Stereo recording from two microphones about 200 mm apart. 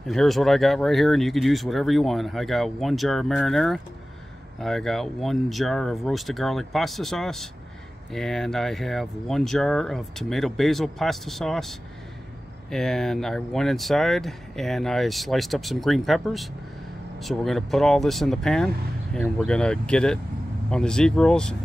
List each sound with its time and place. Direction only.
0.0 s speech: centre (ahead or behind)
12.7 s speech: centre (ahead or behind)